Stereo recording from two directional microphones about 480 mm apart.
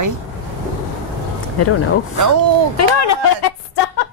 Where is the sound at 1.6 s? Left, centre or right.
Left.